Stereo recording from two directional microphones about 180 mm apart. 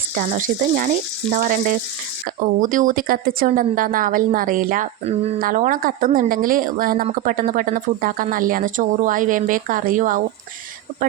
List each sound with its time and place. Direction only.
0.3 s speech: 45° right (ahead or behind)